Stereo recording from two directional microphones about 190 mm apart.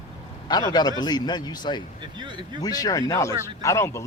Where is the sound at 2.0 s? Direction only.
25° right (ahead or behind).